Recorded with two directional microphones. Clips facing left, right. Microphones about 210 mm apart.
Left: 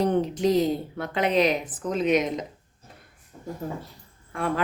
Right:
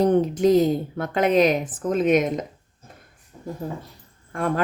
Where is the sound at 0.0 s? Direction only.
50° right (ahead or behind).